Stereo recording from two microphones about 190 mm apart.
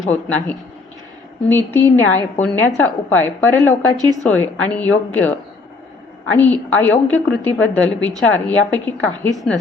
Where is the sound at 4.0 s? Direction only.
20° right (ahead or behind).